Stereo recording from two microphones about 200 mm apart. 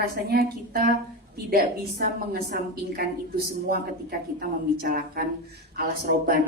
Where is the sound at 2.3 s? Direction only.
50° right (ahead or behind).